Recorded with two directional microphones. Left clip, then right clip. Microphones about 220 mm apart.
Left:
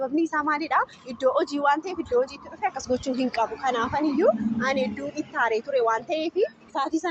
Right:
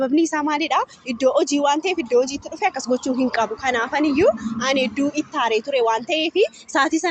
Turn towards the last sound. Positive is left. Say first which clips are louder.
# right 7 dB
turn(degrees=-40)  # may be behind; listen again after turning